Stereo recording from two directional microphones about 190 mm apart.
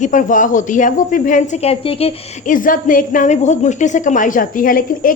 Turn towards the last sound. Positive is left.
turn(degrees=45)  # may be behind; listen again after turning